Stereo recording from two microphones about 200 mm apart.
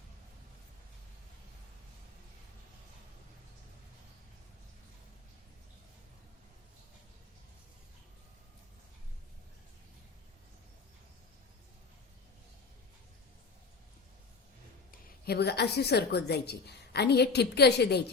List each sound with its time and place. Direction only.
15.2 s a woman's voice: 55° left (ahead or behind)